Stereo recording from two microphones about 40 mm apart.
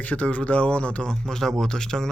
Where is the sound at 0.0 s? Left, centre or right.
Left.